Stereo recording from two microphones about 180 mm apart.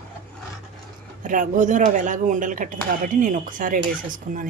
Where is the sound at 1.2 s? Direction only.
50° right (ahead or behind).